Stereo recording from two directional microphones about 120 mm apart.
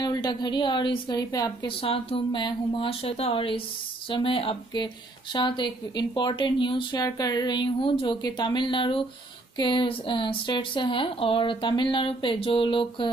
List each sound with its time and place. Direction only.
0.0 s a woman's voice: 35° left (ahead or behind)
1.8 s a woman's voice: 50° left (ahead or behind)